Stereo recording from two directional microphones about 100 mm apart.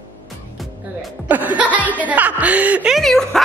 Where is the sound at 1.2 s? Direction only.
15° right (ahead or behind).